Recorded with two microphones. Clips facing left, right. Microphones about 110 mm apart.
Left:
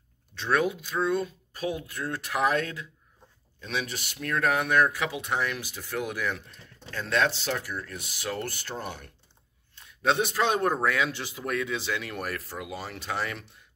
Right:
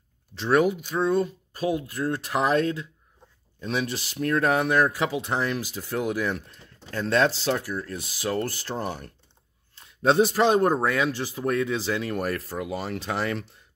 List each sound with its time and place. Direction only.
0.3 s speech: 30° right (ahead or behind)